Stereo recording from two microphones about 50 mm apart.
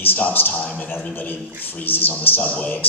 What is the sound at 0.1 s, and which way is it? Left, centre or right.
Speech, left.